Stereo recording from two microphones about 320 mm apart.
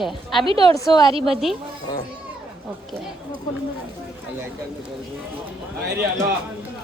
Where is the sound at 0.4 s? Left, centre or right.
Centre.